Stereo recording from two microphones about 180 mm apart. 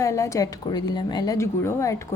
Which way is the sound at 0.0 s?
15° left (ahead or behind).